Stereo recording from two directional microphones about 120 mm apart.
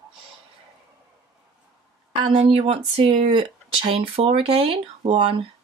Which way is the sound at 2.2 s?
50° right (ahead or behind).